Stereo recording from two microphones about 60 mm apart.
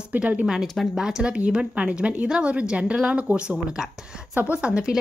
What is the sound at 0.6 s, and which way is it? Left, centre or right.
Speech, centre.